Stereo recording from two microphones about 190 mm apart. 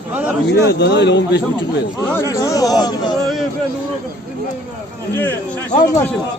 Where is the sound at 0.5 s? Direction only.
60° left (ahead or behind).